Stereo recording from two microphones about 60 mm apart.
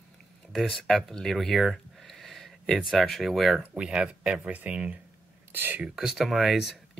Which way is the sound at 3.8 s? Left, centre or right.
Centre.